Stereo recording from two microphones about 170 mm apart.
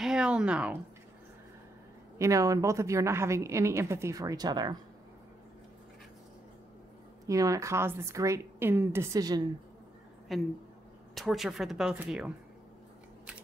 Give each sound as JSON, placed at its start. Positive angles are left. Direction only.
{"t": 0.0, "sound": "a sound", "side_deg": -5}
{"t": 2.1, "sound": "a woman's voice", "side_deg": -20}
{"t": 7.2, "sound": "a woman's voice", "side_deg": -20}
{"t": 10.3, "sound": "speech", "side_deg": 0}